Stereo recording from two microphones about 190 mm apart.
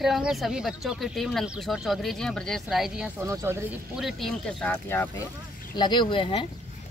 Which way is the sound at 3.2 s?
15° right (ahead or behind).